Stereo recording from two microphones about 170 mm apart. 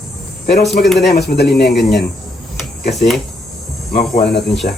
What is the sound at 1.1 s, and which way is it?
Speech, 70° left (ahead or behind).